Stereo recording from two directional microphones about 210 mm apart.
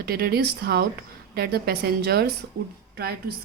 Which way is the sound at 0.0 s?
45° right (ahead or behind).